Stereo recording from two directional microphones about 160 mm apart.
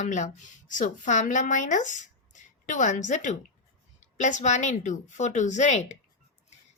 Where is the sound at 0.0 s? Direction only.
50° left (ahead or behind).